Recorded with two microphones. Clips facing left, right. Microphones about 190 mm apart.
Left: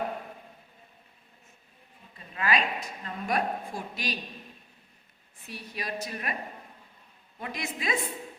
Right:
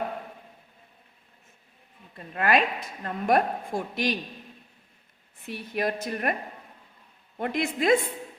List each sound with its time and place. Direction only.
2.1 s a woman's voice: 55° right (ahead or behind)
5.5 s a woman's voice: 55° right (ahead or behind)
7.3 s a woman's voice: 55° right (ahead or behind)